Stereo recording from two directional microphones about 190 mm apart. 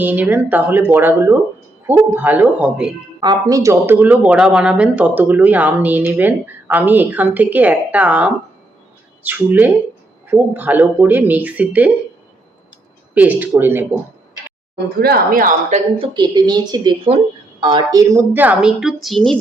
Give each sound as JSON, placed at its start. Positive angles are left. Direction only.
{"t": 0.0, "sound": "speech", "side_deg": -10}
{"t": 3.2, "sound": "speech", "side_deg": -20}
{"t": 13.1, "sound": "speech", "side_deg": -10}
{"t": 15.0, "sound": "speech", "side_deg": -50}
{"t": 16.0, "sound": "a woman's voice", "side_deg": -25}